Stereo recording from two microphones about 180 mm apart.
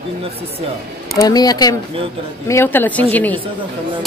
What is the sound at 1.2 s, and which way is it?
A woman's voice, 20° left (ahead or behind).